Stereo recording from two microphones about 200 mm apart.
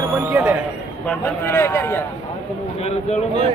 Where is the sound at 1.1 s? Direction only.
10° left (ahead or behind).